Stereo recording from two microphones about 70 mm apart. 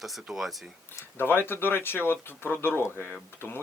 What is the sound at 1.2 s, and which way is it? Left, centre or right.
Speech, left.